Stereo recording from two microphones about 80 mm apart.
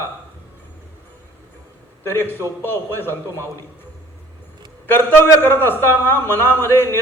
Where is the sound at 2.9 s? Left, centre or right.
Left.